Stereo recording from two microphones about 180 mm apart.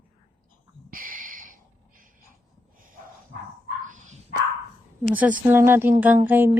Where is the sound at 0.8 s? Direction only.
50° right (ahead or behind).